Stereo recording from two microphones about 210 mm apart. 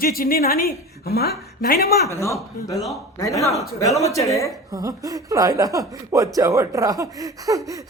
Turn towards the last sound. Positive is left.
turn(degrees=-15)  # may be behind; listen again after turning